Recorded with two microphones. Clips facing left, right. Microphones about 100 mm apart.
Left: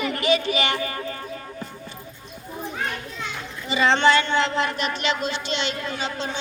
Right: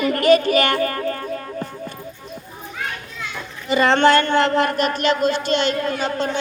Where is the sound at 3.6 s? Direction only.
55° right (ahead or behind).